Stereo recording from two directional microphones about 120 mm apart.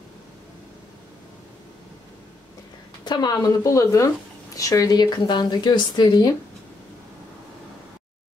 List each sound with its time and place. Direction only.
3.1 s a woman's voice: 35° left (ahead or behind)